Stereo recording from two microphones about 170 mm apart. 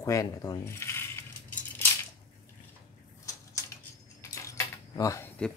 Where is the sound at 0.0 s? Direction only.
20° left (ahead or behind).